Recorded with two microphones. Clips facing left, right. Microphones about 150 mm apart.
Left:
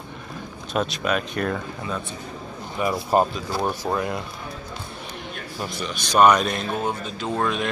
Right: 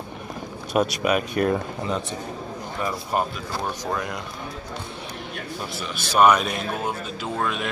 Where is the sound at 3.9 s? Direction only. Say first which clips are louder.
Left 3 dB; 5° left (ahead or behind).